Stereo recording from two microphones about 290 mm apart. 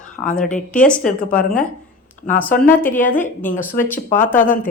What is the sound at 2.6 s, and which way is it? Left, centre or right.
Speech, centre.